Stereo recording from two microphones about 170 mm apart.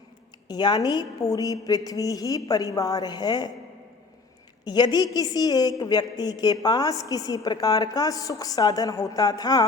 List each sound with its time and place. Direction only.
0.4 s a woman's voice: 25° left (ahead or behind)
4.6 s a woman's voice: 25° left (ahead or behind)